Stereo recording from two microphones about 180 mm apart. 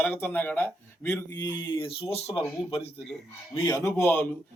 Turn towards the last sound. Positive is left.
turn(degrees=10)  # may be behind; listen again after turning